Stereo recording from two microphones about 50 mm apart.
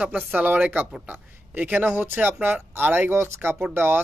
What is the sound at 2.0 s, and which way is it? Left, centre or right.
Speech, right.